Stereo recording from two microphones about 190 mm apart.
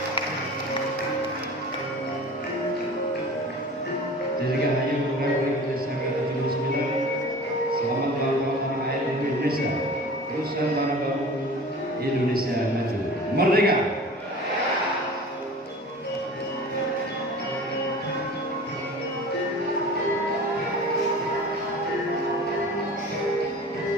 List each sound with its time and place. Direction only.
13.4 s music: 55° right (ahead or behind)